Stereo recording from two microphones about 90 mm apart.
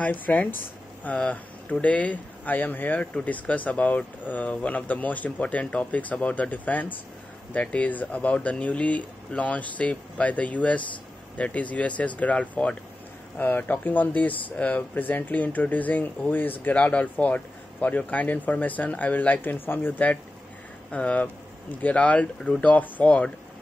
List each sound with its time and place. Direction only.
0.0 s speech: 20° left (ahead or behind)